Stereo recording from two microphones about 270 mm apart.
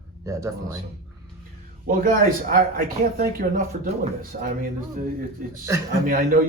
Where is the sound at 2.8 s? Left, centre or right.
Right.